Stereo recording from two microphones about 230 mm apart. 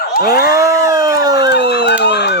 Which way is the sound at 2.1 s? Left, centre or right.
Left.